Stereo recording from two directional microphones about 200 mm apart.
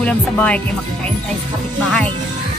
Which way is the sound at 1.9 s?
5° left (ahead or behind).